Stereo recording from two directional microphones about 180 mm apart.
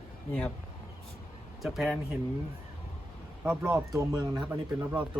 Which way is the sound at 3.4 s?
15° right (ahead or behind).